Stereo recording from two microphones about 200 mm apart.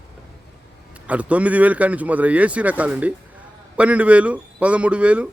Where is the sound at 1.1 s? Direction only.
5° right (ahead or behind).